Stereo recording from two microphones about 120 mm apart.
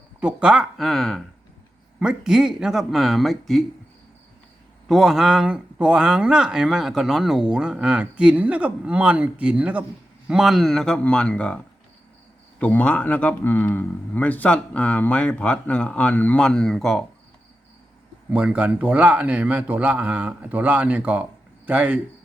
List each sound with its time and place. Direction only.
0.2 s speech: 10° right (ahead or behind)
4.9 s a man's voice: centre (ahead or behind)
18.3 s speech: 10° right (ahead or behind)